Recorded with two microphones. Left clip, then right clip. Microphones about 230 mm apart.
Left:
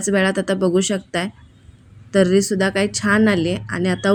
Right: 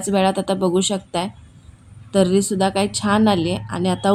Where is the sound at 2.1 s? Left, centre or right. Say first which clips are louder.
Left 2 dB; left.